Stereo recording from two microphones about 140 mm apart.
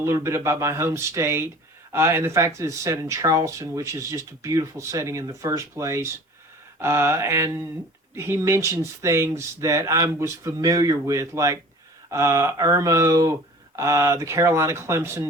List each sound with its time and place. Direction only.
0.0 s speech: 20° right (ahead or behind)